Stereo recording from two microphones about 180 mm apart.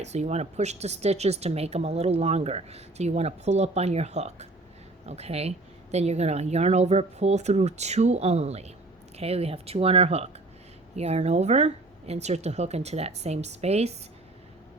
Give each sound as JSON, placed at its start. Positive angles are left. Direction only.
{"t": 0.0, "sound": "speech", "side_deg": -40}